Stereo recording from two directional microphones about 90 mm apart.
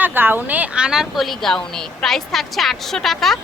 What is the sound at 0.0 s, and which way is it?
A woman's voice, 20° right (ahead or behind).